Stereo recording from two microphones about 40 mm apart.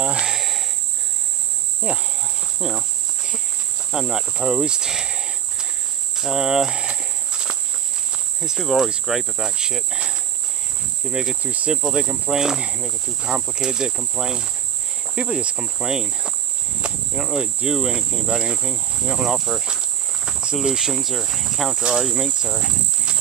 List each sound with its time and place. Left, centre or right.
0.2 s cricket: centre
1.8 s insect: right
2.6 s speech: right
3.9 s cricket: centre
8.5 s cricket: centre
11.4 s speech: right
11.9 s speech: right
14.1 s cricket: centre
15.1 s speech: right
17.1 s insect: centre
17.6 s cricket: centre
19.2 s cricket: centre
20.6 s speech: centre
21.9 s cricket: centre